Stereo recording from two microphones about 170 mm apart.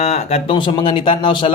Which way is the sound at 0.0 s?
40° left (ahead or behind).